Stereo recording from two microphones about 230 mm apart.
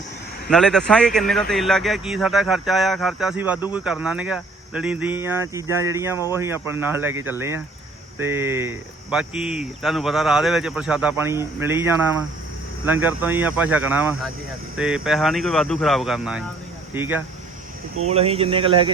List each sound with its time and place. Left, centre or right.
0.4 s speech: centre
18.1 s speech: right